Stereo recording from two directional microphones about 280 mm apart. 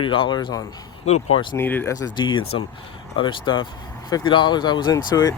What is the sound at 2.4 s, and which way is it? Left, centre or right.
Speech, left.